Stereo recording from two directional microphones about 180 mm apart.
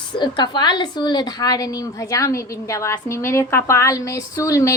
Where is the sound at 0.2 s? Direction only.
25° left (ahead or behind).